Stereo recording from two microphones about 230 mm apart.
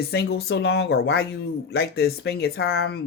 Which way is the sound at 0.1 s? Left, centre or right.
Left.